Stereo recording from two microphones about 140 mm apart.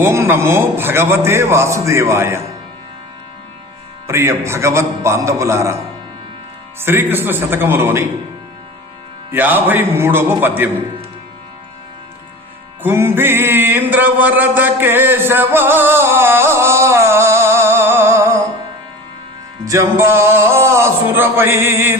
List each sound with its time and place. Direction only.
0.0 s a man's voice: 20° right (ahead or behind)
4.0 s a man's voice: 20° right (ahead or behind)
9.3 s speech: 15° right (ahead or behind)
12.8 s music: 15° right (ahead or behind)
19.6 s speech: 20° right (ahead or behind)